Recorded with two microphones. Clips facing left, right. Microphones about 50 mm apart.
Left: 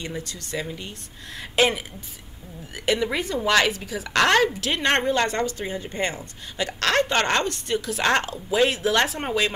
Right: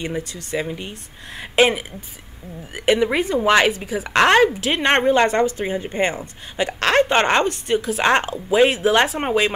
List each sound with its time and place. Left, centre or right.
0.0 s speech: centre